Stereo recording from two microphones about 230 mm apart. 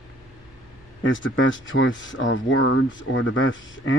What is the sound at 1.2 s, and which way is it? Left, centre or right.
Speech, left.